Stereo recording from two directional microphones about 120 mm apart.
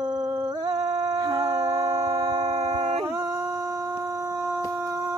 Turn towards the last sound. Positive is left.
turn(degrees=-25)  # may be behind; listen again after turning